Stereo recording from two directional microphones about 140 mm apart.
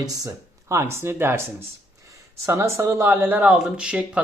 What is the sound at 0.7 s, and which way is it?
Speech, 20° right (ahead or behind).